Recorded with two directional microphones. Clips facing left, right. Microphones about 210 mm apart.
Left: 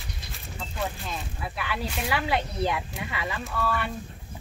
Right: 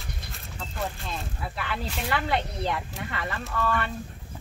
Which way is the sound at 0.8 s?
Centre (ahead or behind).